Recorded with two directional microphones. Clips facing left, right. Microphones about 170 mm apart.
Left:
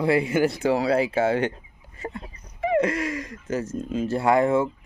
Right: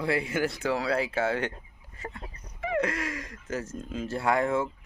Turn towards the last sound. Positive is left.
turn(degrees=10)  # may be behind; listen again after turning